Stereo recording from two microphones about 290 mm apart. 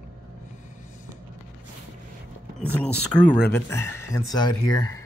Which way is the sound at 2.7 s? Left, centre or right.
Centre.